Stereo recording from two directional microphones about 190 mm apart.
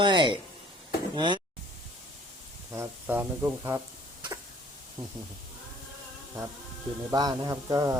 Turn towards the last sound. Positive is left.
turn(degrees=-15)  # may be behind; listen again after turning